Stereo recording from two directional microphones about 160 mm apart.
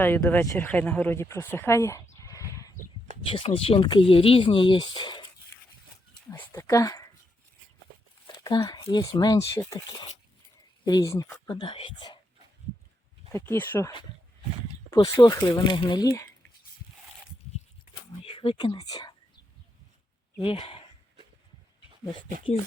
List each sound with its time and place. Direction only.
0.0 s speech: 10° left (ahead or behind)
2.2 s horse: 20° left (ahead or behind)
3.3 s speech: 35° left (ahead or behind)
6.3 s speech: 15° left (ahead or behind)
8.3 s a sound: 25° left (ahead or behind)
8.9 s speech: 25° left (ahead or behind)
13.3 s speech: 15° left (ahead or behind)
15.1 s speech: 20° left (ahead or behind)
18.3 s speech: 30° left (ahead or behind)
20.4 s speech: 35° left (ahead or behind)